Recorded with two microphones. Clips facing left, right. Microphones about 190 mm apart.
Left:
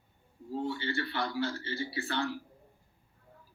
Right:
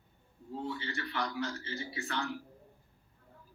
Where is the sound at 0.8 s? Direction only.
30° left (ahead or behind).